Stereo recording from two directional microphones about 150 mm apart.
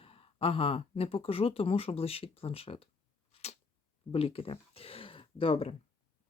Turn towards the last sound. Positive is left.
turn(degrees=40)  # may be behind; listen again after turning